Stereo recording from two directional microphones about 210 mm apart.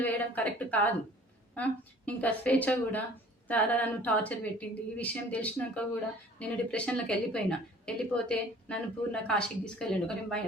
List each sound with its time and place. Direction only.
0.0 s a woman's voice: 10° left (ahead or behind)